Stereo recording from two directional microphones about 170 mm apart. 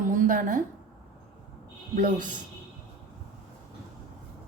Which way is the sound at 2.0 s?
50° right (ahead or behind).